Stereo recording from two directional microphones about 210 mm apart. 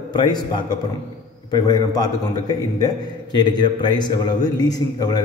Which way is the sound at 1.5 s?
20° left (ahead or behind).